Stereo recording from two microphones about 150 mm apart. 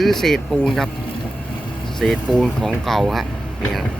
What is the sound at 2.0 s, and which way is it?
Speech, 5° left (ahead or behind).